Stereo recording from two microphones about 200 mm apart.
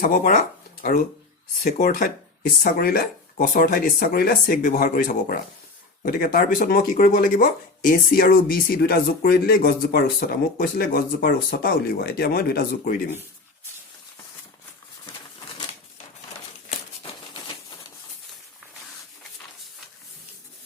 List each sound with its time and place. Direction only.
0.0 s speech: 40° left (ahead or behind)